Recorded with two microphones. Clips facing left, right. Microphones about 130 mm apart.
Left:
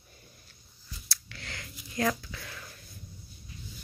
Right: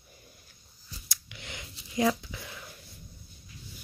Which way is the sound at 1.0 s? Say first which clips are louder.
Left 1 dB; 15° right (ahead or behind).